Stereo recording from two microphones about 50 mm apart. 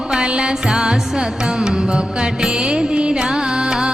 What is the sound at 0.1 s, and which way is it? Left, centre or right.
Music, centre.